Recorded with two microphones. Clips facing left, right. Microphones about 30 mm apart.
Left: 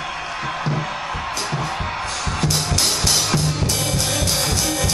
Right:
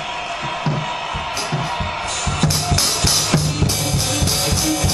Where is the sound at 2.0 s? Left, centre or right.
Right.